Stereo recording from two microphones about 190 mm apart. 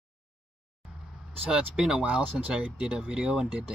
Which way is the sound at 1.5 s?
5° right (ahead or behind).